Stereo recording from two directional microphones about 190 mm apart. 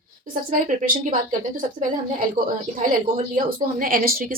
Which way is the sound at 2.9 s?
45° right (ahead or behind).